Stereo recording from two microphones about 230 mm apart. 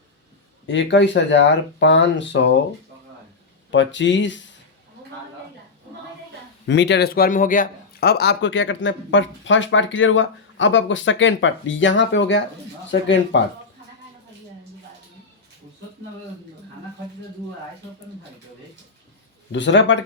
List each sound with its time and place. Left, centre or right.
0.7 s a man's voice: left
3.7 s a man's voice: left
6.7 s a man's voice: left
19.5 s a man's voice: left